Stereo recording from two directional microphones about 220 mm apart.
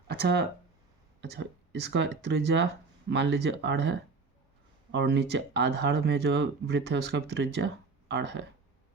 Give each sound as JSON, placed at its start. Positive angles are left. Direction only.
{"t": 0.1, "sound": "speech", "side_deg": -45}